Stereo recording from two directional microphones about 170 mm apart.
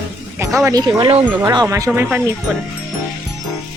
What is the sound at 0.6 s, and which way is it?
Speech, 25° right (ahead or behind).